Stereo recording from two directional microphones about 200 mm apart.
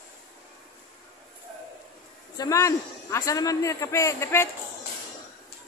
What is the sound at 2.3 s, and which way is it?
A man's voice, 15° left (ahead or behind).